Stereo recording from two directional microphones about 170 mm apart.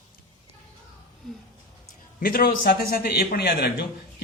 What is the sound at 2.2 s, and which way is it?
Speech, 60° left (ahead or behind).